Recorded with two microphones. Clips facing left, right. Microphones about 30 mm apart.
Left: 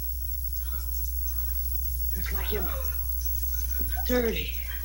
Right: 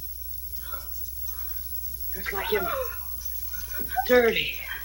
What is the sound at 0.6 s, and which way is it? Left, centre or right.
Whispering, right.